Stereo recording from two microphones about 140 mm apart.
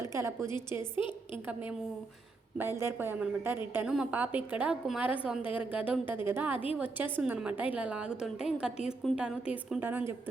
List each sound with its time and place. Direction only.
0.0 s a woman's voice: 20° right (ahead or behind)
2.6 s a woman's voice: 20° right (ahead or behind)
9.8 s a woman's voice: 15° right (ahead or behind)